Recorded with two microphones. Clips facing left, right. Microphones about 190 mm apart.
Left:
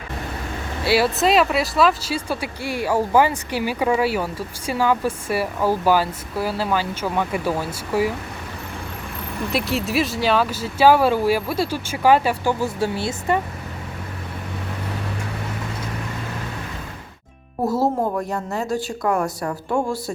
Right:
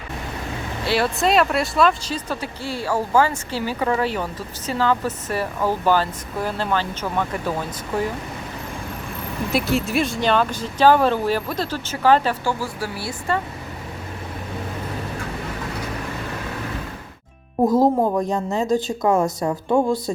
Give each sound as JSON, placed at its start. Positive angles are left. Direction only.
{"t": 0.9, "sound": "speech", "side_deg": 5}
{"t": 9.5, "sound": "speech", "side_deg": 0}
{"t": 17.7, "sound": "a woman's voice", "side_deg": -15}